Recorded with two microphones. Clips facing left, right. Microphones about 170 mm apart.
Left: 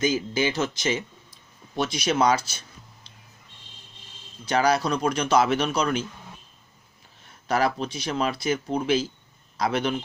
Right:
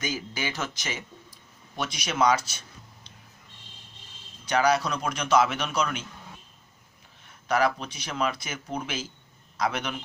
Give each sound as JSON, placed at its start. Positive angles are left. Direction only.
{"t": 0.0, "sound": "speech", "side_deg": 25}
{"t": 4.4, "sound": "speech", "side_deg": 30}
{"t": 7.3, "sound": "speech", "side_deg": 35}